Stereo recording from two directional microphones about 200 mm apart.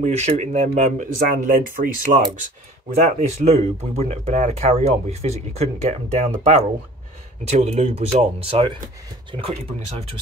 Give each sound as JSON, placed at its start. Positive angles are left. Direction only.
{"t": 0.0, "sound": "speech", "side_deg": -35}
{"t": 2.9, "sound": "speech", "side_deg": -35}